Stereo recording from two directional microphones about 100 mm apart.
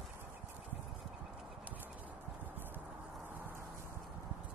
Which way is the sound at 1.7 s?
15° right (ahead or behind).